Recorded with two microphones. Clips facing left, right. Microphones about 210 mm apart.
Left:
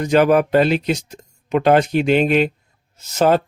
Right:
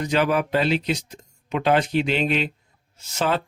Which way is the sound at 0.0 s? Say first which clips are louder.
Left 7 dB; 50° left (ahead or behind).